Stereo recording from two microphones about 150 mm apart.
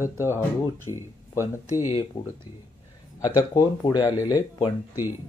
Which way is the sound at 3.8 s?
35° left (ahead or behind).